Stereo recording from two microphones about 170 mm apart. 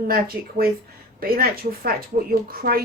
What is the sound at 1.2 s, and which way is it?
A woman's voice, 60° right (ahead or behind).